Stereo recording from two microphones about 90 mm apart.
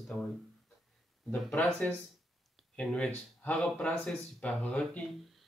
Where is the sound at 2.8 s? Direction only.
10° left (ahead or behind).